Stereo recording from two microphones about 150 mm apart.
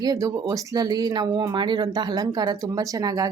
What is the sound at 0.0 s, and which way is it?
Speech, 25° right (ahead or behind).